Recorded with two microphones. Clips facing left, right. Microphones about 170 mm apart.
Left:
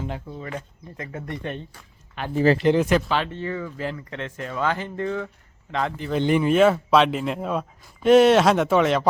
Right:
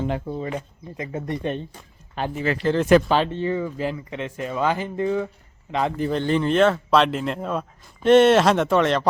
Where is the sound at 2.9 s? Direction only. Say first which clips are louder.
Right 6 dB; 55° right (ahead or behind).